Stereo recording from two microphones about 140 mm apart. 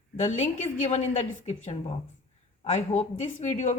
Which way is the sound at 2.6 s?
55° left (ahead or behind).